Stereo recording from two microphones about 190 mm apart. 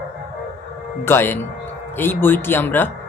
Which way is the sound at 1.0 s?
10° left (ahead or behind).